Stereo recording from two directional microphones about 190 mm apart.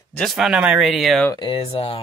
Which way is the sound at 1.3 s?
25° left (ahead or behind).